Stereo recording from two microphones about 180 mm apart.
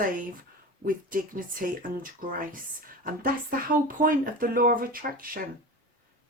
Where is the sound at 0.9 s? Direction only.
50° right (ahead or behind).